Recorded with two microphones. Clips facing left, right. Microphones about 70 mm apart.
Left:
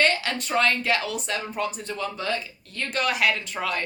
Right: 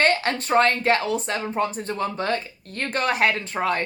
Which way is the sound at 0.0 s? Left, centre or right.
Right.